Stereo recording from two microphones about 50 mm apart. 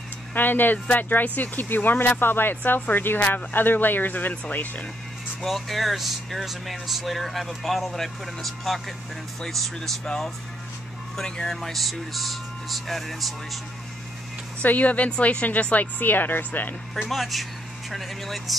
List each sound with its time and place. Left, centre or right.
0.3 s speech: left
3.2 s speech: left
3.5 s speech: left
5.4 s speech: centre
14.6 s speech: left
17.0 s speech: centre